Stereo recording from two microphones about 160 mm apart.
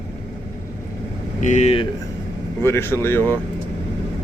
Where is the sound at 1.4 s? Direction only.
50° left (ahead or behind).